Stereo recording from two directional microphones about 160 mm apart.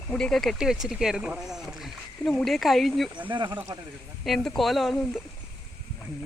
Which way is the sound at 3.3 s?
30° right (ahead or behind).